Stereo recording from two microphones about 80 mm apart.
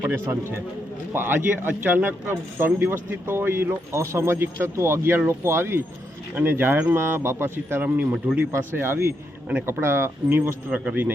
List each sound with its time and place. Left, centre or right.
0.1 s speech: right
10.7 s speech: centre